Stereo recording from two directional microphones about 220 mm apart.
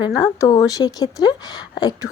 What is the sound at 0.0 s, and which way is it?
Speech, 15° left (ahead or behind).